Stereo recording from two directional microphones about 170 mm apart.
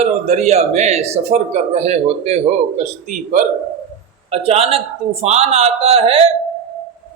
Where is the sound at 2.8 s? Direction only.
50° right (ahead or behind).